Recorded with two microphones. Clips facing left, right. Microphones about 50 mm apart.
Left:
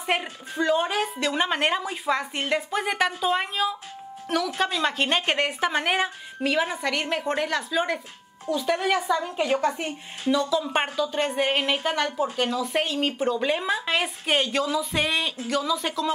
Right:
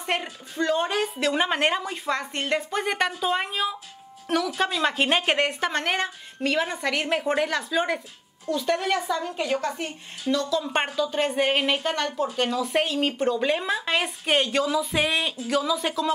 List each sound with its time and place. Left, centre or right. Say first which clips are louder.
0.0 s a woman's voice: left 2 dB; centre